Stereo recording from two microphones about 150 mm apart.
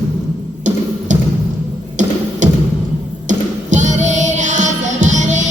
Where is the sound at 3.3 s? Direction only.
55° right (ahead or behind).